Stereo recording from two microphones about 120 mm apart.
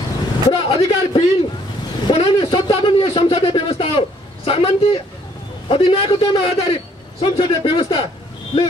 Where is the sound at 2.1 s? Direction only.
45° left (ahead or behind).